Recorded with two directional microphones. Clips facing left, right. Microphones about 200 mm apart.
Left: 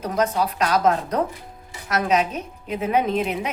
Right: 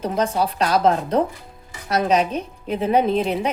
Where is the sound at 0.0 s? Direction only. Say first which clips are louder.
Right 1 dB; 30° right (ahead or behind).